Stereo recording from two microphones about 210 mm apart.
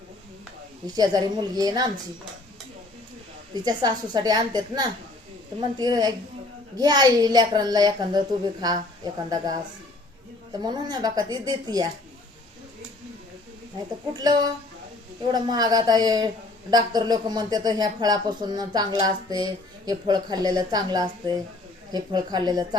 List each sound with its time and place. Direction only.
0.9 s speech: 20° right (ahead or behind)
3.5 s speech: 20° right (ahead or behind)
14.2 s speech: 20° right (ahead or behind)